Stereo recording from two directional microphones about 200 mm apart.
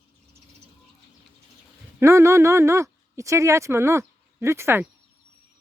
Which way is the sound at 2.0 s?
15° right (ahead or behind).